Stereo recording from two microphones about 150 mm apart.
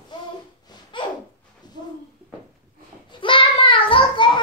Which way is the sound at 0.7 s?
30° left (ahead or behind).